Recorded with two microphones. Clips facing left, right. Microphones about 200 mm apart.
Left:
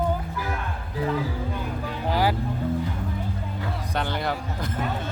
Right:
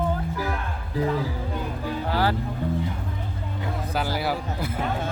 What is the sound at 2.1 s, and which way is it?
Music, 15° left (ahead or behind).